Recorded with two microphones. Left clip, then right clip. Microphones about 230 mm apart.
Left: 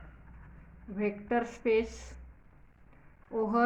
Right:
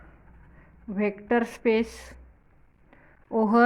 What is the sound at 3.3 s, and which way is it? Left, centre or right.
Speech, right.